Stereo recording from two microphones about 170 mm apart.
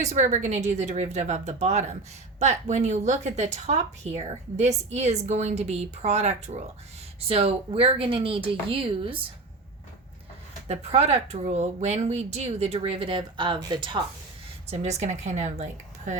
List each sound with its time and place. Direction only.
0.0 s a woman's voice: 45° right (ahead or behind)
10.7 s a woman's voice: 40° right (ahead or behind)
14.7 s a woman's voice: 40° right (ahead or behind)